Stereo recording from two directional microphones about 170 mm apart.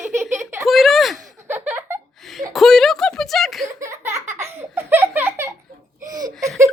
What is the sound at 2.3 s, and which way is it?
Speech, centre (ahead or behind).